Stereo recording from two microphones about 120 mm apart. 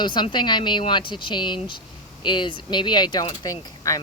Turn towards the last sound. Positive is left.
turn(degrees=30)  # may be behind; listen again after turning